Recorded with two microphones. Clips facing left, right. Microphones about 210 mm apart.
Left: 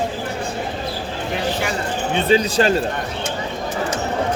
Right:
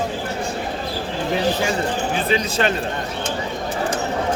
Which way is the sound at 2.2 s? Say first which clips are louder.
Left 7 dB; 30° left (ahead or behind).